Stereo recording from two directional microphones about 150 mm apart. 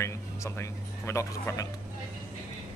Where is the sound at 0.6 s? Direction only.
20° left (ahead or behind).